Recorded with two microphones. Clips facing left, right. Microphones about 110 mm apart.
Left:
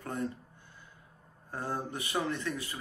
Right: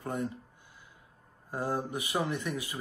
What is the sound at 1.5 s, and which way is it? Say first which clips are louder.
Speech: right 3 dB; 10° right (ahead or behind).